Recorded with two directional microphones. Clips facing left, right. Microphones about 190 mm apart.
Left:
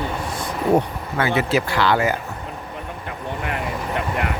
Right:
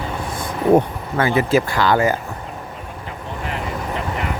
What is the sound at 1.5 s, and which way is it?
Speech, 45° right (ahead or behind).